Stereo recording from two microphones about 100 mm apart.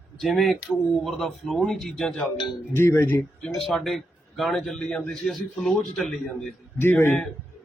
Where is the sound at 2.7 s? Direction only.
25° left (ahead or behind).